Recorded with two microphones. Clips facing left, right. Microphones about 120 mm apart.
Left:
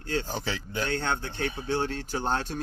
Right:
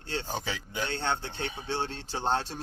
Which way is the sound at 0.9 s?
25° right (ahead or behind).